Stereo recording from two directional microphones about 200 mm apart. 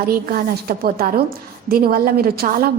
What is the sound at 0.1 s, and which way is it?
A woman's voice, 50° right (ahead or behind).